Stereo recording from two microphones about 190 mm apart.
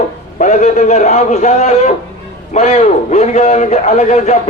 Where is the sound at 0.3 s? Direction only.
40° left (ahead or behind).